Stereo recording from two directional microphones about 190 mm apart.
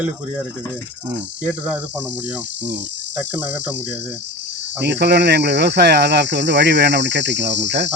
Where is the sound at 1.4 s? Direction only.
5° right (ahead or behind).